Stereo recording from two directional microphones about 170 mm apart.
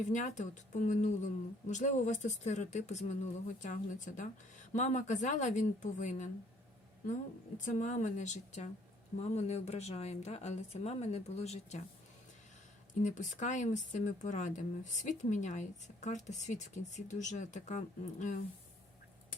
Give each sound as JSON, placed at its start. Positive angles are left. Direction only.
{"t": 0.1, "sound": "speech", "side_deg": 45}
{"t": 7.6, "sound": "a woman's voice", "side_deg": 50}
{"t": 12.9, "sound": "speech", "side_deg": 45}